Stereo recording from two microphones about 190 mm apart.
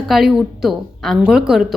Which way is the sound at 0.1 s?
Centre (ahead or behind).